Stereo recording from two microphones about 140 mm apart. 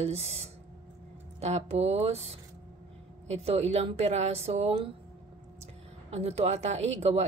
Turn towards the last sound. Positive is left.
turn(degrees=-50)  # may be behind; listen again after turning